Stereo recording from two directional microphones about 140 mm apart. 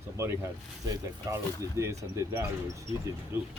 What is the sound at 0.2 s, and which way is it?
Speech, 20° right (ahead or behind).